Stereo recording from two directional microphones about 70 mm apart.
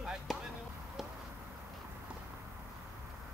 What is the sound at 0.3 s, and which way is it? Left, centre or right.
Basketball bounce, centre.